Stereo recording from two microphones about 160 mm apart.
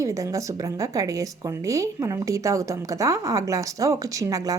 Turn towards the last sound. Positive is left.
turn(degrees=-20)  # may be behind; listen again after turning